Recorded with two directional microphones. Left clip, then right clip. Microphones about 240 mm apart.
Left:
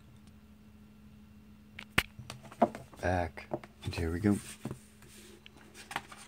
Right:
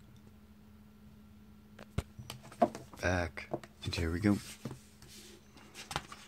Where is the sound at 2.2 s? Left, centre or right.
Centre.